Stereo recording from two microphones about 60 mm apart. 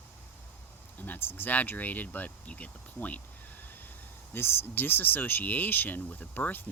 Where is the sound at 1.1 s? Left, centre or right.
Left.